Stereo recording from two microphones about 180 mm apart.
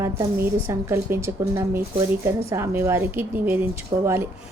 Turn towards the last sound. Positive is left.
turn(degrees=-15)  # may be behind; listen again after turning